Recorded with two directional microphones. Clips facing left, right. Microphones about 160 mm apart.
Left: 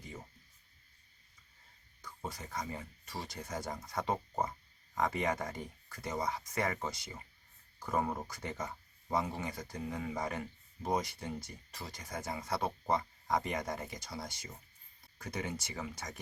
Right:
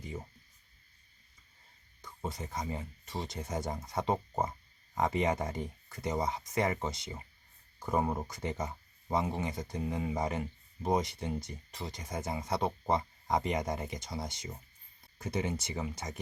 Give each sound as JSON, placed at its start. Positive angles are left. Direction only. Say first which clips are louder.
{"t": 2.0, "sound": "speech", "louder": "right 4 dB", "side_deg": -20}